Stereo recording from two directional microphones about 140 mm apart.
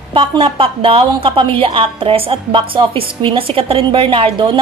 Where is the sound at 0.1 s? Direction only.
35° right (ahead or behind).